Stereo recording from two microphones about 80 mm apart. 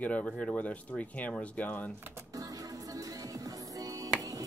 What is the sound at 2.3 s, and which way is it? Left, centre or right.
Music, right.